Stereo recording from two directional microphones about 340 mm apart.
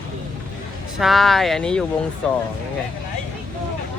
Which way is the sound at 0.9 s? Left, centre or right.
Centre.